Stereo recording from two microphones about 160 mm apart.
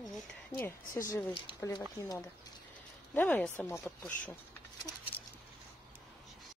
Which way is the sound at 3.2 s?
10° left (ahead or behind).